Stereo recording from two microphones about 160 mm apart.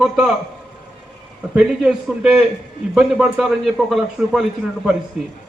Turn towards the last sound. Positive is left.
turn(degrees=-5)  # may be behind; listen again after turning